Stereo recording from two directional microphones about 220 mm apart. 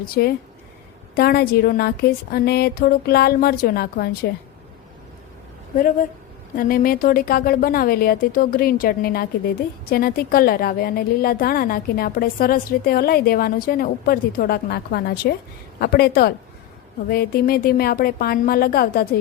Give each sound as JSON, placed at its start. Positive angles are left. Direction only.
{"t": 0.0, "sound": "a woman's voice", "side_deg": 45}
{"t": 6.6, "sound": "a woman's voice", "side_deg": 40}